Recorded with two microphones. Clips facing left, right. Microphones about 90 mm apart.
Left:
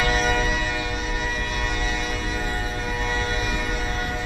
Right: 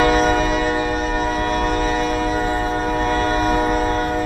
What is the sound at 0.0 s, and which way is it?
Train, 40° right (ahead or behind).